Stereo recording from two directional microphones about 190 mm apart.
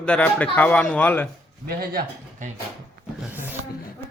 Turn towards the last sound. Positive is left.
turn(degrees=-10)  # may be behind; listen again after turning